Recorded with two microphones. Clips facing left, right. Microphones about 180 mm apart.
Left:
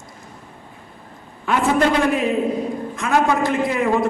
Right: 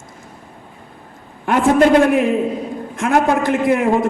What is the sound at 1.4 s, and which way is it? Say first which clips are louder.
A man's voice: right 5 dB; 50° right (ahead or behind).